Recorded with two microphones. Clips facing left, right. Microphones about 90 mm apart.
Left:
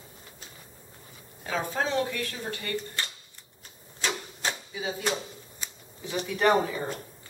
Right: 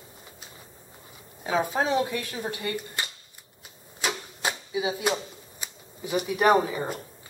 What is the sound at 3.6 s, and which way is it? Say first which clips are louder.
Typewriter: right 2 dB; 10° right (ahead or behind).